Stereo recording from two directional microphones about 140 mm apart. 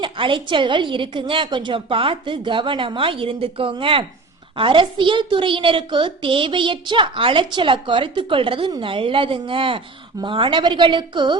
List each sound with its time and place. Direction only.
0.0 s a woman's voice: 35° right (ahead or behind)